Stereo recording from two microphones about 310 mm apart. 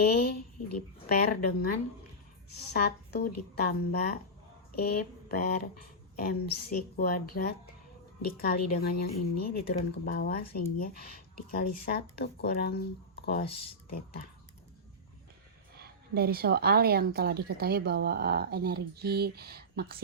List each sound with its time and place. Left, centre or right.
0.0 s speech: left
2.7 s speech: left
15.7 s a woman's voice: right